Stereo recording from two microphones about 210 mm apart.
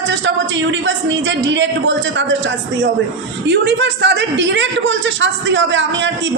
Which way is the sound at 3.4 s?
55° right (ahead or behind).